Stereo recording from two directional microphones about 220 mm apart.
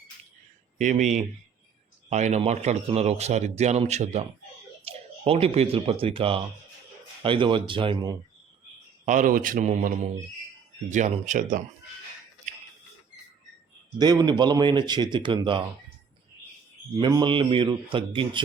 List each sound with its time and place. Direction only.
0.8 s speech: 35° right (ahead or behind)
2.0 s speech: 30° right (ahead or behind)
9.0 s speech: 35° right (ahead or behind)
14.0 s speech: 20° right (ahead or behind)
17.0 s speech: 20° right (ahead or behind)